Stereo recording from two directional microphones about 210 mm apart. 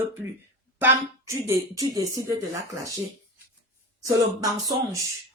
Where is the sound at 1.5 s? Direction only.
15° right (ahead or behind).